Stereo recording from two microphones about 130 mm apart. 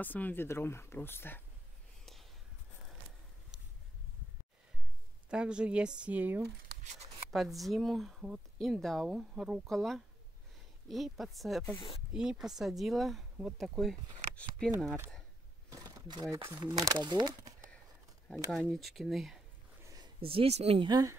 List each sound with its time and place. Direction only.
0.0 s speech: 15° left (ahead or behind)
5.3 s speech: 5° right (ahead or behind)
7.2 s speech: centre (ahead or behind)
15.7 s a sound: 35° right (ahead or behind)
16.4 s speech: 25° right (ahead or behind)
18.3 s speech: 5° left (ahead or behind)
19.8 s a sound: 25° right (ahead or behind)
20.2 s speech: 45° right (ahead or behind)
20.8 s speech: 30° right (ahead or behind)